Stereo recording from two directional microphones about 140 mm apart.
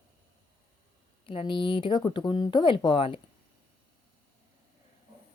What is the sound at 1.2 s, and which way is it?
A woman's voice, 35° left (ahead or behind).